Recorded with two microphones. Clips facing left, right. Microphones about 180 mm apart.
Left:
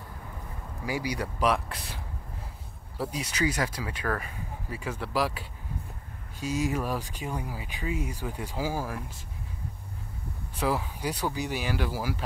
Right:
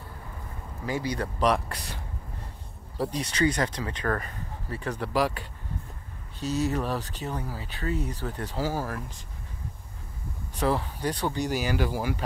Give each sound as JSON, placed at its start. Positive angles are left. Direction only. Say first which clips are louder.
{"t": 0.8, "sound": "speech", "louder": "right 2 dB", "side_deg": 10}
{"t": 3.0, "sound": "speech", "louder": "right 3 dB", "side_deg": 5}
{"t": 10.6, "sound": "speech", "louder": "right 2 dB", "side_deg": 5}